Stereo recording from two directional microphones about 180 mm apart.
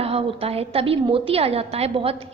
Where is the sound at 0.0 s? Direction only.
35° right (ahead or behind).